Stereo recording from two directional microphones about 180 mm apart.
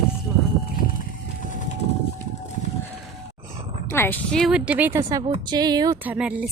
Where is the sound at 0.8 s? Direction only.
50° left (ahead or behind).